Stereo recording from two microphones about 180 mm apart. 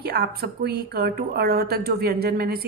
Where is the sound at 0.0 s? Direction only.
60° right (ahead or behind).